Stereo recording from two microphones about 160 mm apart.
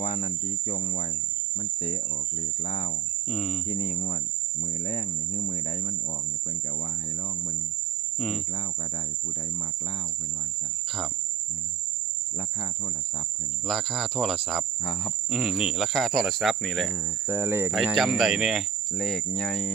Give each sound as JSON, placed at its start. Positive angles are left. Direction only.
{"t": 0.0, "sound": "cricket", "side_deg": 40}
{"t": 3.3, "sound": "cricket", "side_deg": 5}
{"t": 4.9, "sound": "cricket", "side_deg": 40}
{"t": 13.7, "sound": "cricket", "side_deg": 0}
{"t": 17.2, "sound": "cricket", "side_deg": -15}
{"t": 17.7, "sound": "cricket", "side_deg": 0}